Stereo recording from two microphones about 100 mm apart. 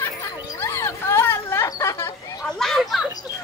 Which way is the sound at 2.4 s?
5° left (ahead or behind).